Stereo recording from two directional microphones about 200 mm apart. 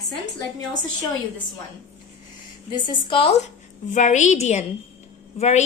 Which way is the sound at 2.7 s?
25° left (ahead or behind).